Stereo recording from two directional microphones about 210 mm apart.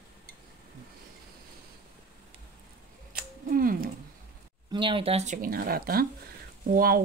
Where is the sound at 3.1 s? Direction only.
45° right (ahead or behind).